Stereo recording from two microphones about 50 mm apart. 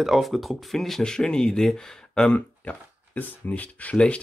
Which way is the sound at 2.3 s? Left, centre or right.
Left.